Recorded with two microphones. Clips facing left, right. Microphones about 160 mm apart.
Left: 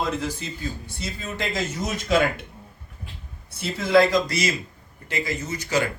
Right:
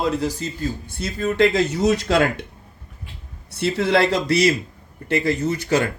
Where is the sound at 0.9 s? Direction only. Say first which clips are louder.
Right 9 dB; 55° right (ahead or behind); by 2.4 s 75° right (ahead or behind).